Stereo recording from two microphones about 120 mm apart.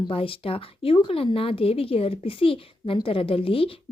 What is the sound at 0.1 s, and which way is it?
A woman's voice, 50° left (ahead or behind).